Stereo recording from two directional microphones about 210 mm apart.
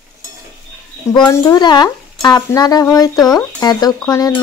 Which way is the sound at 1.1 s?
15° left (ahead or behind).